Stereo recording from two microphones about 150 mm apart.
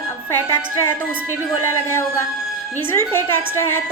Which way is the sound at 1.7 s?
15° left (ahead or behind).